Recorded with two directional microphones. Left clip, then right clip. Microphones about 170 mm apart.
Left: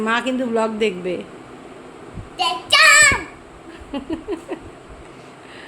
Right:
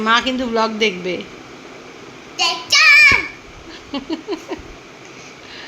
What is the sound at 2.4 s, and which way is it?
Child singing, 10° left (ahead or behind).